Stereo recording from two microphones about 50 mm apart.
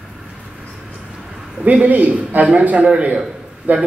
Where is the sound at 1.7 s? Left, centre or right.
Right.